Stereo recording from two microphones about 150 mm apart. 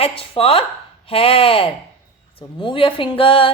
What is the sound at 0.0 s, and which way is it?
A woman's voice, 40° left (ahead or behind).